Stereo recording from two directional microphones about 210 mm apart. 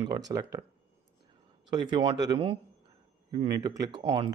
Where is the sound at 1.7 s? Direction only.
20° right (ahead or behind).